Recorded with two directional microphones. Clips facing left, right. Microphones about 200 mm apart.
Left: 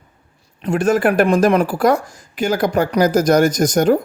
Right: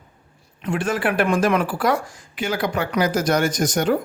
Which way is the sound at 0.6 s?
40° left (ahead or behind).